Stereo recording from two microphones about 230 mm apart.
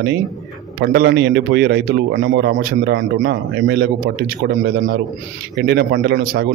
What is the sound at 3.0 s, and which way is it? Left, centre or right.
Speech, right.